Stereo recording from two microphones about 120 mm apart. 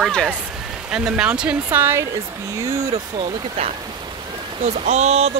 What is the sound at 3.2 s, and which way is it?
Speech, 60° right (ahead or behind).